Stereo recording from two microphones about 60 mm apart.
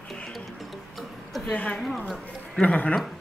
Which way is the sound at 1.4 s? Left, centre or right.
Centre.